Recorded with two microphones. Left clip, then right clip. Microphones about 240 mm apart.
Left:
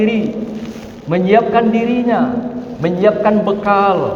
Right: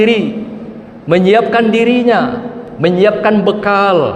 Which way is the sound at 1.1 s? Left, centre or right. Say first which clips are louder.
Right 3 dB; right.